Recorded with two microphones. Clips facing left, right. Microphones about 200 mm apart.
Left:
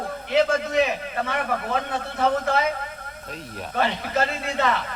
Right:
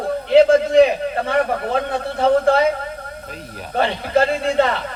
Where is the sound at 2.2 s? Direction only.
30° right (ahead or behind).